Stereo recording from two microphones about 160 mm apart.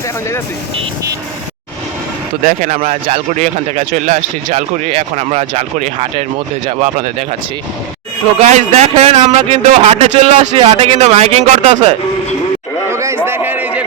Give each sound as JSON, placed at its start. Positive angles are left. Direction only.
{"t": 2.4, "sound": "speech", "side_deg": -55}
{"t": 8.4, "sound": "a man's voice", "side_deg": -45}
{"t": 12.9, "sound": "a sound", "side_deg": -20}